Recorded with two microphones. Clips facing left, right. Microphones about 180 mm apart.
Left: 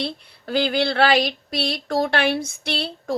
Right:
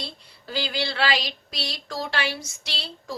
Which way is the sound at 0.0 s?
60° left (ahead or behind).